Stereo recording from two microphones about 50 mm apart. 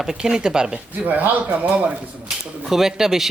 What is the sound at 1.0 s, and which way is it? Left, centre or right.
Speech, right.